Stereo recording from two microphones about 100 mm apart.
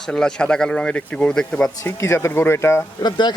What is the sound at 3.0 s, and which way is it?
Speech, 45° left (ahead or behind).